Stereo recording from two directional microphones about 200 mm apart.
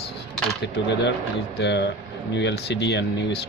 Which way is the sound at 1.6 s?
60° left (ahead or behind).